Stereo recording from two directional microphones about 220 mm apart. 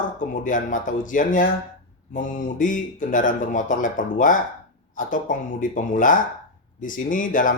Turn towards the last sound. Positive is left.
turn(degrees=35)  # may be behind; listen again after turning